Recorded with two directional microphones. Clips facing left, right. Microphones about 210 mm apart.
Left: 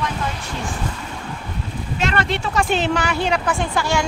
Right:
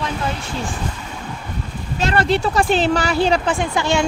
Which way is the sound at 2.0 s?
35° right (ahead or behind).